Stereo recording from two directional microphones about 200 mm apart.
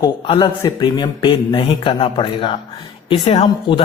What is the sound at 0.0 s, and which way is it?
A man's voice, 20° left (ahead or behind).